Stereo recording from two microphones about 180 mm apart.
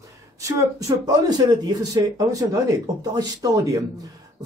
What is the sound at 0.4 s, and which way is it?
A man's voice, 20° right (ahead or behind).